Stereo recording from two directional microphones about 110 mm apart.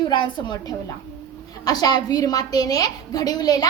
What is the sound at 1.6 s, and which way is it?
A woman's voice, 35° left (ahead or behind).